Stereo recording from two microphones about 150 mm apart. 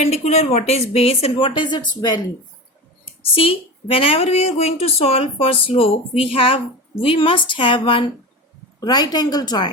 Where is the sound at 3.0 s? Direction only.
40° left (ahead or behind).